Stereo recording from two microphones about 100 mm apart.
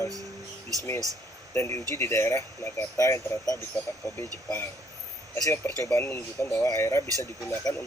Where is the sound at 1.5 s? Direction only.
30° left (ahead or behind).